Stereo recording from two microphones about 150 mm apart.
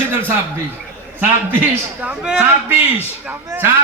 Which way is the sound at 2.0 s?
5° right (ahead or behind).